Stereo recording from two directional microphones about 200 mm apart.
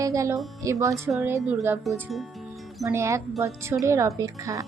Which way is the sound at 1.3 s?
10° right (ahead or behind).